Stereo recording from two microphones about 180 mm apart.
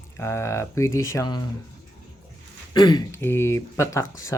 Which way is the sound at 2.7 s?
25° left (ahead or behind).